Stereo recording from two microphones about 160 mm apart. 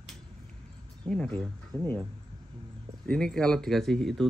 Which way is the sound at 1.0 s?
5° left (ahead or behind).